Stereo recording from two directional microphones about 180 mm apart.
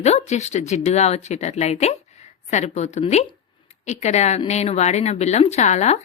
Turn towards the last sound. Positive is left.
turn(degrees=40)  # may be behind; listen again after turning